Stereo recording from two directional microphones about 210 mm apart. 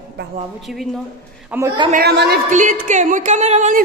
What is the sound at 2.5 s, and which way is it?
Speech, 35° right (ahead or behind).